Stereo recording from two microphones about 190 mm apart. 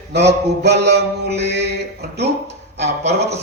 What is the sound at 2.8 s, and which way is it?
Speech, 35° right (ahead or behind).